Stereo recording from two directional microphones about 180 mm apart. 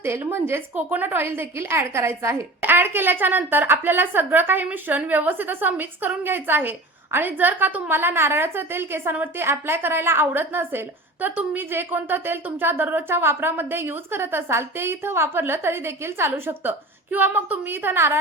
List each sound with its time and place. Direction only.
0.0 s a woman's voice: 15° right (ahead or behind)